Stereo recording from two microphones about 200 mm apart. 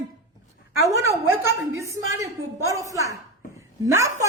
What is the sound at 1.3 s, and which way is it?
A woman's voice, 10° right (ahead or behind).